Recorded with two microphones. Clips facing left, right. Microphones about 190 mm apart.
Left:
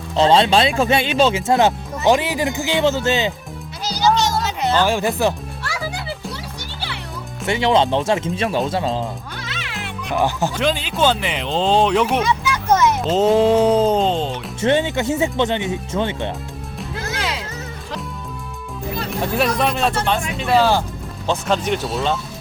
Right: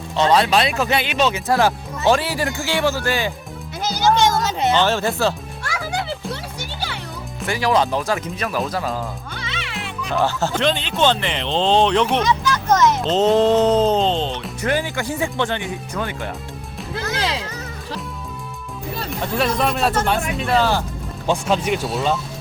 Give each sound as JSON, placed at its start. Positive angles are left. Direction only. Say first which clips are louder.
{"t": 0.2, "sound": "speech", "louder": "left 2 dB", "side_deg": 25}
{"t": 3.8, "sound": "music", "louder": "right 1 dB", "side_deg": -50}
{"t": 4.8, "sound": "speech", "louder": "left 3 dB", "side_deg": 10}
{"t": 7.4, "sound": "speech", "louder": "left 2 dB", "side_deg": 25}
{"t": 9.3, "sound": "music", "louder": "right 1 dB", "side_deg": 0}
{"t": 10.2, "sound": "speech", "louder": "even", "side_deg": 15}
{"t": 14.6, "sound": "speech", "louder": "left 5 dB", "side_deg": 25}
{"t": 17.2, "sound": "music", "louder": "right 2 dB", "side_deg": -30}
{"t": 19.5, "sound": "speech", "louder": "even", "side_deg": 0}
{"t": 20.6, "sound": "speech", "louder": "left 4 dB", "side_deg": 15}
{"t": 21.2, "sound": "speech", "louder": "even", "side_deg": -10}